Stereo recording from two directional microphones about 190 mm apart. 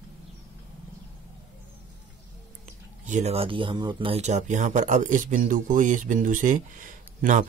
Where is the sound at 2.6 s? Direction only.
40° right (ahead or behind).